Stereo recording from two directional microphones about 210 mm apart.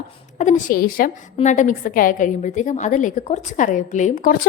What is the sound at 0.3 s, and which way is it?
A woman's voice, 35° left (ahead or behind).